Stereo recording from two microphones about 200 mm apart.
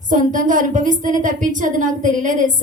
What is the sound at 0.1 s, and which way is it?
A woman's voice, 40° right (ahead or behind).